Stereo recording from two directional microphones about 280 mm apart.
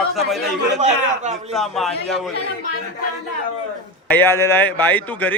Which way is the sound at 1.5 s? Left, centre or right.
Centre.